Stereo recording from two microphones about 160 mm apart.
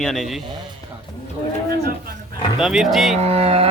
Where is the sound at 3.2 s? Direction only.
40° right (ahead or behind).